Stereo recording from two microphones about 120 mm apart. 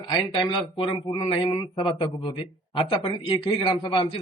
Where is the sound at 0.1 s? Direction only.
45° left (ahead or behind).